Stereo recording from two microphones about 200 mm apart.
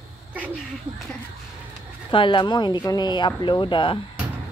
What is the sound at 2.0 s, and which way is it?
Speech, 25° left (ahead or behind).